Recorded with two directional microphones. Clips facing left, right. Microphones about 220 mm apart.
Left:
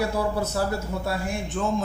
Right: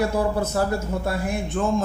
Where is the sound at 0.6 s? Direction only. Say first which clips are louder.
Right 3 dB; 50° right (ahead or behind).